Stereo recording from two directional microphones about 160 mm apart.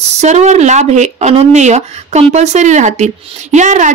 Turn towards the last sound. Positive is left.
turn(degrees=-50)  # may be behind; listen again after turning